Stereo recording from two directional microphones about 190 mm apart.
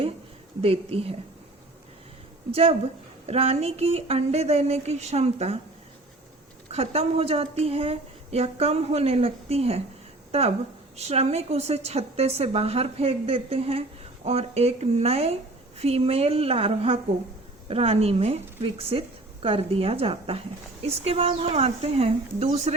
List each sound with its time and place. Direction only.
0.6 s a woman's voice: 30° right (ahead or behind)
2.5 s a woman's voice: 30° right (ahead or behind)
6.7 s a woman's voice: 35° right (ahead or behind)
10.9 s a woman's voice: 35° right (ahead or behind)